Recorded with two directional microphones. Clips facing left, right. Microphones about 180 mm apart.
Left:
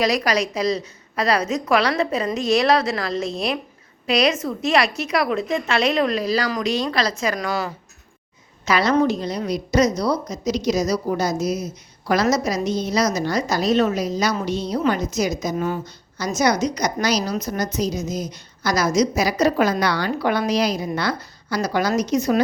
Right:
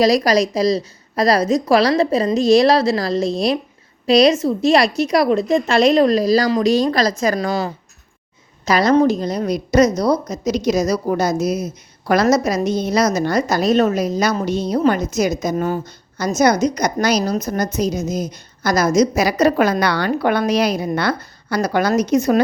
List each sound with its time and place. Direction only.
0.0 s a woman's voice: 35° right (ahead or behind)
8.6 s a woman's voice: 40° right (ahead or behind)
19.1 s a woman's voice: 65° right (ahead or behind)